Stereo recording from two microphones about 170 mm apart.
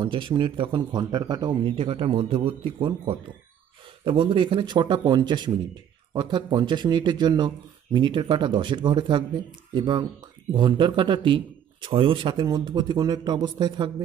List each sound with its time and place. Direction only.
0.0 s a man's voice: 30° right (ahead or behind)